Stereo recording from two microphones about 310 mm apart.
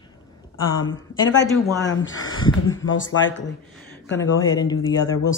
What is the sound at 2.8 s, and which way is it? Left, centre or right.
Speech, left.